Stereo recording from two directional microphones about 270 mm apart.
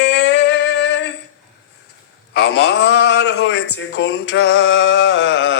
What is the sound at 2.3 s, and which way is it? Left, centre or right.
A man's voice, left.